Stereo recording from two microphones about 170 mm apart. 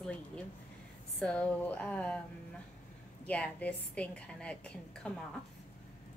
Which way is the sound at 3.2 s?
10° left (ahead or behind).